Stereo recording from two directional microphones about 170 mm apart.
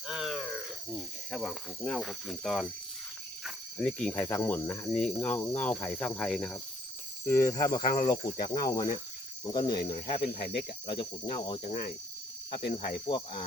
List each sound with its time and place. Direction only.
0.1 s speech: centre (ahead or behind)
3.8 s cricket: 5° left (ahead or behind)
7.3 s cricket: 15° left (ahead or behind); by 11.7 s 30° left (ahead or behind)
11.7 s insect: 60° left (ahead or behind)
12.5 s cricket: 35° left (ahead or behind)